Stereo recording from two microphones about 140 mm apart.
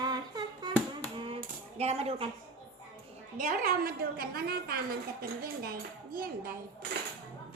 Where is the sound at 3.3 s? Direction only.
75° right (ahead or behind); by 6.6 s 90° right.